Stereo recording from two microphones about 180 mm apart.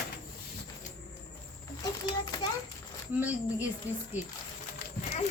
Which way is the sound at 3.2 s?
10° right (ahead or behind).